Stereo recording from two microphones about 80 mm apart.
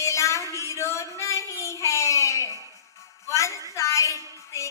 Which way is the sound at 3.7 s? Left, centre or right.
Left.